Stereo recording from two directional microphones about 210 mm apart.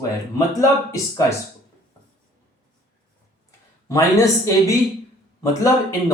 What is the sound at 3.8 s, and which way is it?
Speech, 15° left (ahead or behind).